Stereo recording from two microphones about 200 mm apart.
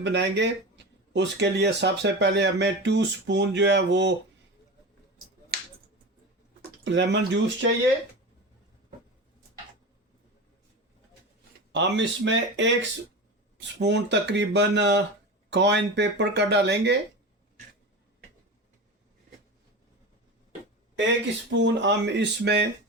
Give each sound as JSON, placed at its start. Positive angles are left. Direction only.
{"t": 0.0, "sound": "speech", "side_deg": -60}
{"t": 5.5, "sound": "finger snapping", "side_deg": -50}
{"t": 6.6, "sound": "speech", "side_deg": -60}
{"t": 11.7, "sound": "speech", "side_deg": -65}
{"t": 13.7, "sound": "speech", "side_deg": -60}
{"t": 21.5, "sound": "speech", "side_deg": -65}